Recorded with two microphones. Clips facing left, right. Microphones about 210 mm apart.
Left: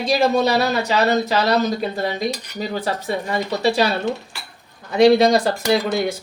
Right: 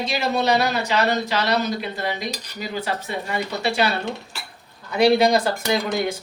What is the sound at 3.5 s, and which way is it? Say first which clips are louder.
Speech: left 5 dB; 35° left (ahead or behind).